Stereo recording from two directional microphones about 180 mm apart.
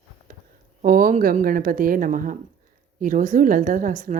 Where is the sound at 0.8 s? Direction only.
50° right (ahead or behind).